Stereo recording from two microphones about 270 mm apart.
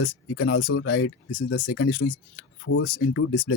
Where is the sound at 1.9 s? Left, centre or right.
Left.